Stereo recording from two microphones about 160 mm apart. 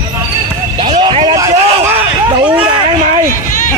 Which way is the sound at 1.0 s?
35° right (ahead or behind).